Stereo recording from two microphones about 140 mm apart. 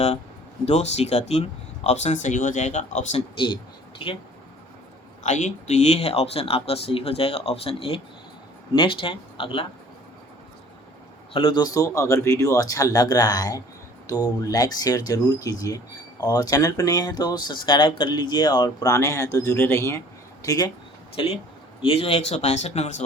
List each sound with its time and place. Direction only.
0.6 s speech: 50° left (ahead or behind)
3.9 s speech: 35° left (ahead or behind)
5.2 s speech: 60° left (ahead or behind); by 9.6 s 40° left (ahead or behind)
11.3 s speech: 35° left (ahead or behind)
21.2 s speech: 40° left (ahead or behind)